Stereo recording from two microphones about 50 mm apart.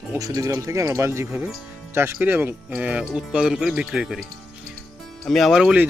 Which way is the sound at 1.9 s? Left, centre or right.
Right.